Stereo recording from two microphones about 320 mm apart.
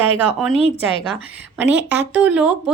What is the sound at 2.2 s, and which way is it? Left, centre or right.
Speech, centre.